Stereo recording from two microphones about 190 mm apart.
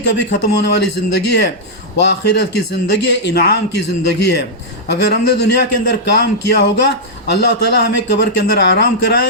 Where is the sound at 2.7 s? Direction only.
65° left (ahead or behind).